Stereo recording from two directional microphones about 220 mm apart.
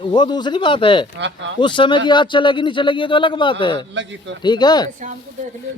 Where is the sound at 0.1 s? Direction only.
20° left (ahead or behind).